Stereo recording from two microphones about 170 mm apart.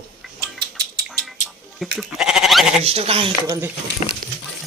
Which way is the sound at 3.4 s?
15° right (ahead or behind).